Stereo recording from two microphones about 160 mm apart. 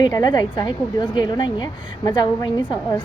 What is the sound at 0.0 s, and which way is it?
A woman's voice, 25° left (ahead or behind).